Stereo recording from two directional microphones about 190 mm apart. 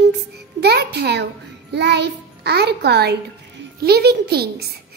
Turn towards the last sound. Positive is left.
turn(degrees=-55)  # may be behind; listen again after turning